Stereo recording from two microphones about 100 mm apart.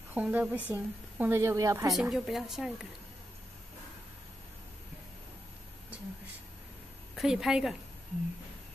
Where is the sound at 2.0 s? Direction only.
Centre (ahead or behind).